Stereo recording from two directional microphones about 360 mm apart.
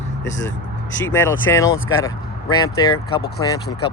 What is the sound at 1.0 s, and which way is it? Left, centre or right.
Speech, centre.